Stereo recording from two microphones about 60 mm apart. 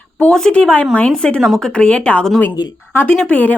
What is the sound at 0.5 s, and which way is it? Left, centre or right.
Speech, centre.